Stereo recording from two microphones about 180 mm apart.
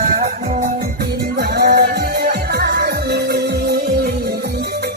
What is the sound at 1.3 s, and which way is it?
Music, 60° right (ahead or behind).